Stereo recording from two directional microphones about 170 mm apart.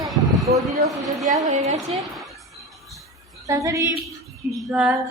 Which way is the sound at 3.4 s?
20° right (ahead or behind).